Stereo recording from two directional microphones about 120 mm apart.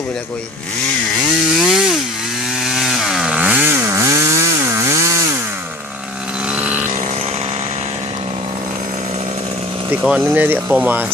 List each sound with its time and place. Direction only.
1.5 s chainsaw: 5° right (ahead or behind); by 5.2 s 25° right (ahead or behind)
6.5 s vehicle: 10° right (ahead or behind)
9.9 s speech: 5° right (ahead or behind)